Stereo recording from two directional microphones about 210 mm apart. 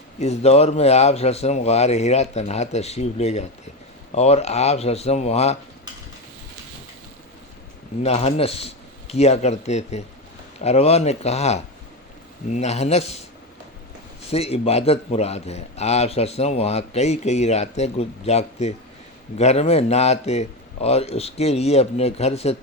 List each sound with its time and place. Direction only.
0.2 s a man's voice: 30° left (ahead or behind)
8.0 s a man's voice: 30° left (ahead or behind)
14.3 s a man's voice: 30° left (ahead or behind)